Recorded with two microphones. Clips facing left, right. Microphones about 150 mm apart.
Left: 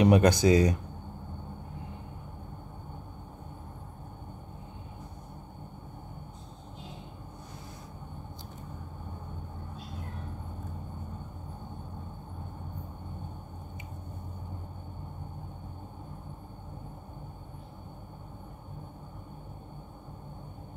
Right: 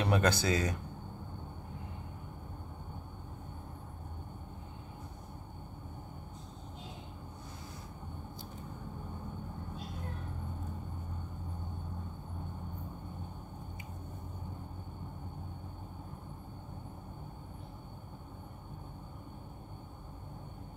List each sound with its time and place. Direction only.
0.0 s speech: 15° left (ahead or behind)